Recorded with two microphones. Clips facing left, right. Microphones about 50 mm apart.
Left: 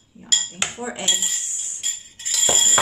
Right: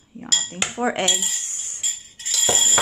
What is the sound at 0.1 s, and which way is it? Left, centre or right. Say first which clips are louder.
Cutlery: right 8 dB; right.